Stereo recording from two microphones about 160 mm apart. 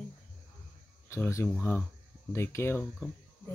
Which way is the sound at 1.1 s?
20° left (ahead or behind).